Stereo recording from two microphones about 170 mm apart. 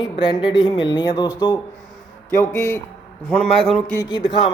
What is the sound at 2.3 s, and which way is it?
Speech, 15° left (ahead or behind).